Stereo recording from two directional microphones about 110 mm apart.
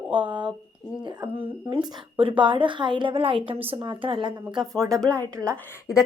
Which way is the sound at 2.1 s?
50° right (ahead or behind).